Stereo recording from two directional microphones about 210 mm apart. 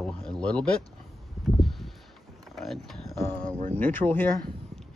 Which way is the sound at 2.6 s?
Centre (ahead or behind).